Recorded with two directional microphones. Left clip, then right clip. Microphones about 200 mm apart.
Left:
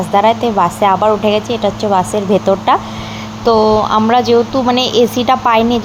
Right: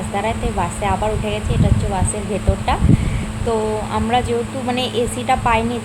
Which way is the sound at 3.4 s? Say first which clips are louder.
Left 11 dB; 20° left (ahead or behind).